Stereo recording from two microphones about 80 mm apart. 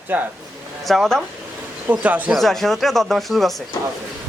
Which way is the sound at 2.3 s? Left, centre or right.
Centre.